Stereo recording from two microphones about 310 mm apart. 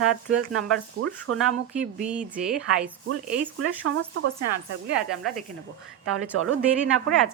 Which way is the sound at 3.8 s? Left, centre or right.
Right.